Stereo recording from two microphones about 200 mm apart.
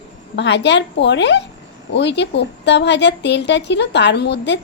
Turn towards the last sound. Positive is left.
turn(degrees=60)  # may be behind; listen again after turning